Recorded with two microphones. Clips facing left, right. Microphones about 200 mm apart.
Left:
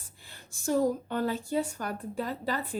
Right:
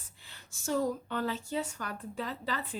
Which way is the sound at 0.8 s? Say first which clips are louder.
Left 4 dB; 40° left (ahead or behind).